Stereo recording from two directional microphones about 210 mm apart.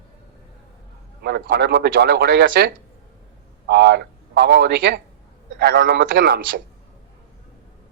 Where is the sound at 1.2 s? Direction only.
50° right (ahead or behind).